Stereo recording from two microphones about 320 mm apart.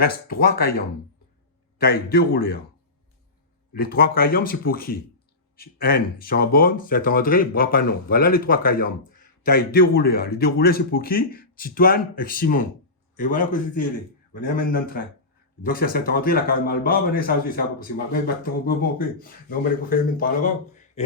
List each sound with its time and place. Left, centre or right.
0.0 s speech: left
1.8 s speech: left
3.7 s speech: left